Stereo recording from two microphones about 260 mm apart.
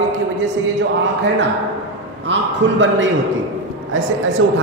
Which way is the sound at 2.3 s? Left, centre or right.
Right.